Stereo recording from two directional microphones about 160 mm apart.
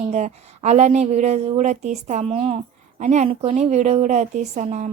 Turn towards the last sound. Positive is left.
turn(degrees=-45)  # may be behind; listen again after turning